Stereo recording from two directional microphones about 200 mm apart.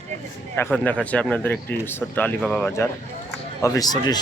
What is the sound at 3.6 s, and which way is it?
Speech, 20° left (ahead or behind).